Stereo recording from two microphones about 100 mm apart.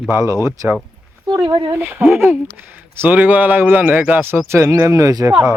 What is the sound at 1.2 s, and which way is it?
Speech, 45° right (ahead or behind).